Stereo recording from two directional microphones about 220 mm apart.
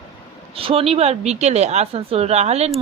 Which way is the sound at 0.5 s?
25° right (ahead or behind).